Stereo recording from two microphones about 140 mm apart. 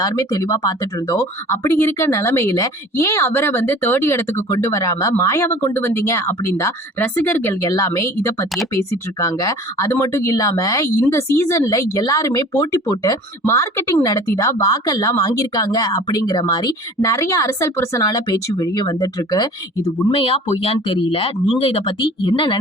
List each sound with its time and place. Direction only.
0.0 s speech: 25° left (ahead or behind)
7.6 s speech: 25° left (ahead or behind)
20.1 s speech: 40° left (ahead or behind)